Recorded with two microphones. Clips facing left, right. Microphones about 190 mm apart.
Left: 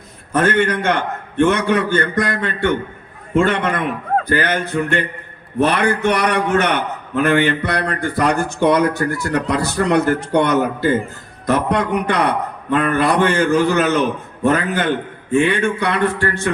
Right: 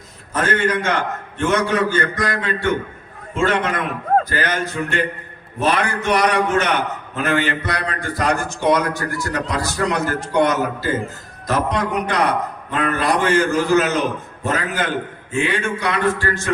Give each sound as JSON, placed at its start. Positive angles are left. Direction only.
{"t": 0.3, "sound": "a man's voice", "side_deg": 60}